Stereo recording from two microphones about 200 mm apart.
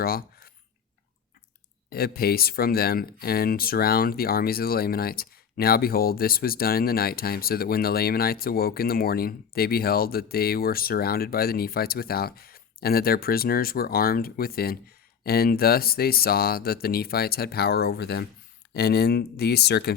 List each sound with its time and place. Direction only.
0.0 s cutlery: 50° left (ahead or behind)
1.9 s speech: 50° left (ahead or behind)